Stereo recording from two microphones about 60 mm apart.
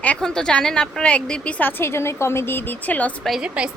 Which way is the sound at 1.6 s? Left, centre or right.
Left.